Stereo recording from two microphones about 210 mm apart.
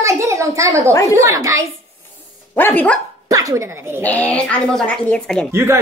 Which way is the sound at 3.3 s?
15° right (ahead or behind).